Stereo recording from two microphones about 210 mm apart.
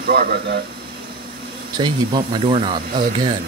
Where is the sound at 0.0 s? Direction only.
45° right (ahead or behind).